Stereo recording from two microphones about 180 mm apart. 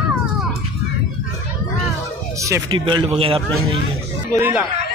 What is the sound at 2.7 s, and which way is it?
Speech, 30° right (ahead or behind).